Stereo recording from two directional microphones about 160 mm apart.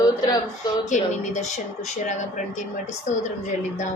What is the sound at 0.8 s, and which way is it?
Speech, 50° left (ahead or behind).